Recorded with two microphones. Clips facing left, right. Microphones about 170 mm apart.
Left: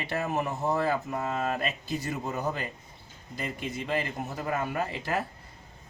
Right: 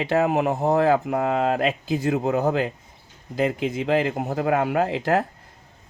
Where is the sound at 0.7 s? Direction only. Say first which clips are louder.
Right 10 dB; 75° right (ahead or behind).